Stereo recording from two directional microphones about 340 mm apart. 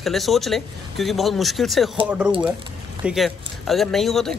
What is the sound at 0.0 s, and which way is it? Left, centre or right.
Speech, centre.